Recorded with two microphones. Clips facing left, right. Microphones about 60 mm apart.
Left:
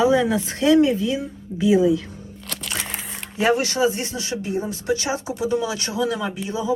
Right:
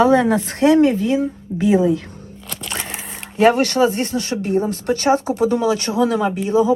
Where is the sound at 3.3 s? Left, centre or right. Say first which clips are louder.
Right 6 dB; right.